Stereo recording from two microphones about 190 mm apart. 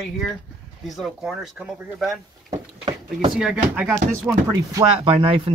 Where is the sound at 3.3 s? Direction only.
5° right (ahead or behind).